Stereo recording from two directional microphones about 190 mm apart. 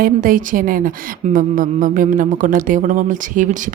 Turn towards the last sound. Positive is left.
turn(degrees=-45)  # may be behind; listen again after turning